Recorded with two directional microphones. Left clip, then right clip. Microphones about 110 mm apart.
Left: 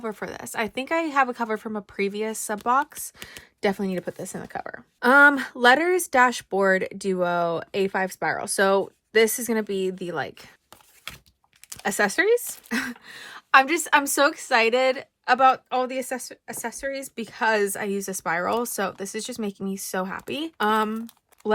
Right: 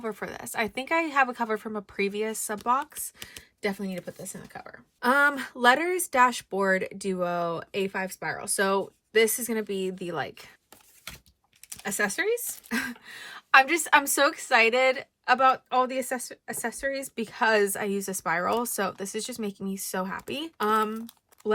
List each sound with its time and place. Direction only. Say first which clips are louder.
0.0 s a woman's voice: left 2 dB; 15° left (ahead or behind)
3.6 s a woman's voice: left 6 dB; 45° left (ahead or behind)
4.9 s speech: left 7 dB; 20° left (ahead or behind)
7.9 s speech: left 6 dB; 40° left (ahead or behind)
8.6 s speech: left 5 dB; 25° left (ahead or behind)
11.7 s speech: left 5 dB; 50° left (ahead or behind)
12.6 s a woman's voice: left 2 dB; 15° left (ahead or behind)